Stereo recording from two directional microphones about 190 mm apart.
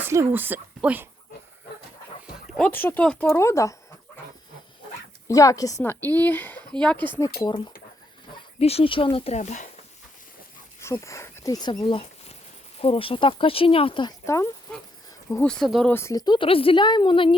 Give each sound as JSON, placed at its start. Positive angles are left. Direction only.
{"t": 0.0, "sound": "speech", "side_deg": -15}
{"t": 2.6, "sound": "a woman's voice", "side_deg": 10}
{"t": 5.3, "sound": "a woman's voice", "side_deg": 15}
{"t": 7.4, "sound": "speech", "side_deg": 25}
{"t": 10.8, "sound": "speech", "side_deg": 15}
{"t": 14.3, "sound": "a woman's voice", "side_deg": 15}
{"t": 15.9, "sound": "speech", "side_deg": 15}